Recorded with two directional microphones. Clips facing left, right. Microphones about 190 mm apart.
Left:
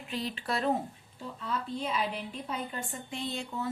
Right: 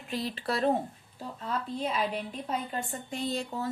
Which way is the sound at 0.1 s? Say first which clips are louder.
Right 2 dB; 40° right (ahead or behind).